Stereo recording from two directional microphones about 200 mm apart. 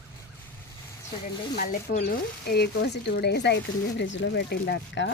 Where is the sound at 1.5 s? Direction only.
40° left (ahead or behind).